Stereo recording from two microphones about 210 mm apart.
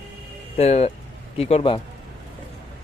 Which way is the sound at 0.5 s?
30° left (ahead or behind).